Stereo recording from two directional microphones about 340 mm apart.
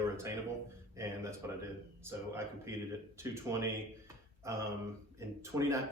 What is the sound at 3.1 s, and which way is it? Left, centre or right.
Speech, centre.